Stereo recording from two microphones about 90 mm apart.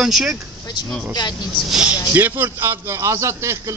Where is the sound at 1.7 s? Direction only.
15° right (ahead or behind); by 3.5 s 30° right (ahead or behind).